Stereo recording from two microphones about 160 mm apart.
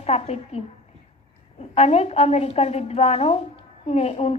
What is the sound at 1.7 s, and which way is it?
A woman's voice, 45° left (ahead or behind).